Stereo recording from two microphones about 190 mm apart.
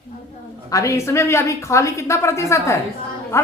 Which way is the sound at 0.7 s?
15° left (ahead or behind).